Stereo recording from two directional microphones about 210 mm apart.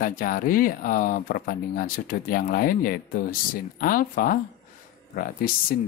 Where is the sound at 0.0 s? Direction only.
40° left (ahead or behind).